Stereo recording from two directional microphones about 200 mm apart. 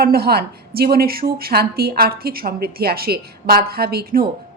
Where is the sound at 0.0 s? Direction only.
50° right (ahead or behind).